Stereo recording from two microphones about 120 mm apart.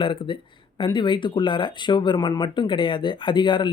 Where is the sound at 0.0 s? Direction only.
45° left (ahead or behind).